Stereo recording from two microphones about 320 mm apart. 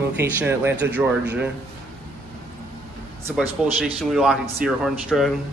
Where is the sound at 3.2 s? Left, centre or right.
Centre.